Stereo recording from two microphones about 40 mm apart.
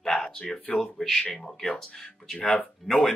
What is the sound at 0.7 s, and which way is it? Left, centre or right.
Speech, centre.